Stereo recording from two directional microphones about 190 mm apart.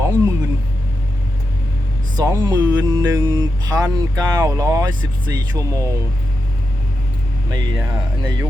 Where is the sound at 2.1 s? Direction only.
20° right (ahead or behind).